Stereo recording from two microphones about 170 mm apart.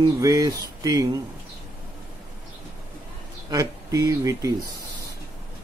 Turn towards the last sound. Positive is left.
turn(degrees=-20)  # may be behind; listen again after turning